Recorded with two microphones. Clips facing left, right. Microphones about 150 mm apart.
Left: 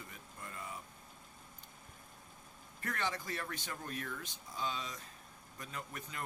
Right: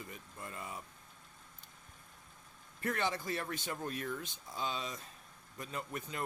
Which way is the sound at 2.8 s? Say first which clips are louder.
Right 4 dB; 25° right (ahead or behind).